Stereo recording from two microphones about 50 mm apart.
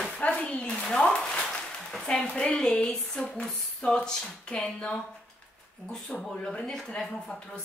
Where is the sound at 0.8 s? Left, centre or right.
Centre.